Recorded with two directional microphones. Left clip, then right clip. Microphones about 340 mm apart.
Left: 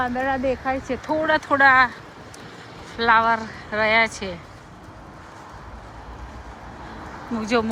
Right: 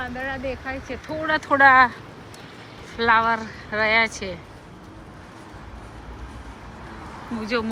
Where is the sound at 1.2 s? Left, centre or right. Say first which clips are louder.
Right 1 dB; centre.